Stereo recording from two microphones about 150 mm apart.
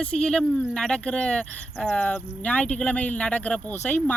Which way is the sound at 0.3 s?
5° left (ahead or behind).